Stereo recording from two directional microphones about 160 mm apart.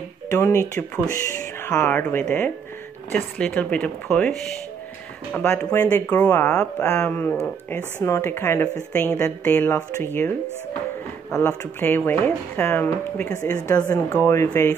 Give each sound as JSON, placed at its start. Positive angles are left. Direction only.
{"t": 0.3, "sound": "speech", "side_deg": 15}
{"t": 5.5, "sound": "speech", "side_deg": 15}
{"t": 11.3, "sound": "speech", "side_deg": 10}